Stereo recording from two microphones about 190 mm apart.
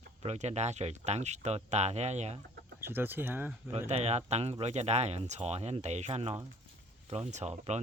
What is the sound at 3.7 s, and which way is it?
Speech, 30° right (ahead or behind).